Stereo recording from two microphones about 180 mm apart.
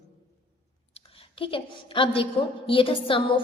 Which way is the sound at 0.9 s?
35° left (ahead or behind).